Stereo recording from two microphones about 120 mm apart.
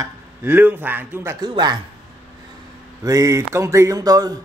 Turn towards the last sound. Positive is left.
turn(degrees=-30)  # may be behind; listen again after turning